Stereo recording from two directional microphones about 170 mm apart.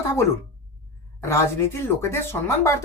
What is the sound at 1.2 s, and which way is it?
Speech, 15° left (ahead or behind).